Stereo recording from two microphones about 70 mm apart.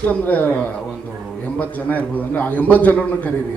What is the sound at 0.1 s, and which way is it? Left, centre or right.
Speech, left.